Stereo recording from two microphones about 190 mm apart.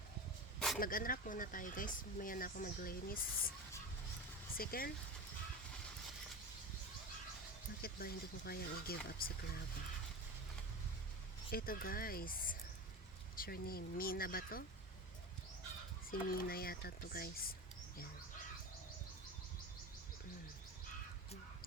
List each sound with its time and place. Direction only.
0.8 s speech: 50° left (ahead or behind)
4.5 s speech: 50° left (ahead or behind)
7.8 s speech: 55° left (ahead or behind)
11.5 s speech: 50° left (ahead or behind)
16.3 s speech: 50° left (ahead or behind)